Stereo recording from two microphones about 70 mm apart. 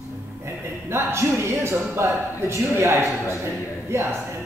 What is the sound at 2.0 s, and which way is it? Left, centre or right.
A man's voice, right.